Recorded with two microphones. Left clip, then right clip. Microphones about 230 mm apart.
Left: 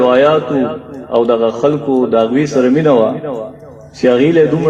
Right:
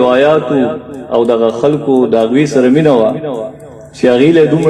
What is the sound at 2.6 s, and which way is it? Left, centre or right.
Speech, right.